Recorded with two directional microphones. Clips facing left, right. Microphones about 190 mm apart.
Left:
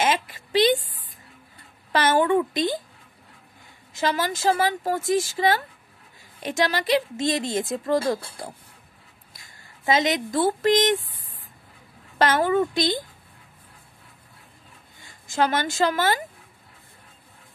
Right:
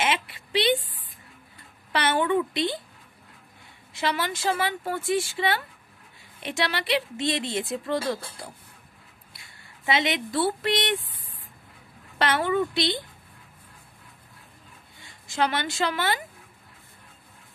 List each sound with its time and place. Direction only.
0.0 s a sound: 40° left (ahead or behind)
1.9 s speech: 45° left (ahead or behind)
3.9 s speech: 40° left (ahead or behind)
12.2 s speech: 45° left (ahead or behind)
15.0 s speech: 45° left (ahead or behind)